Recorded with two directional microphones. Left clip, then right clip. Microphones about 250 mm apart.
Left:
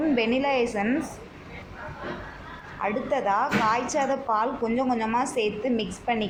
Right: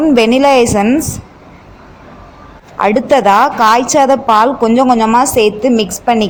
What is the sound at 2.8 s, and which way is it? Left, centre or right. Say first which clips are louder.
A woman's voice: right 17 dB; right.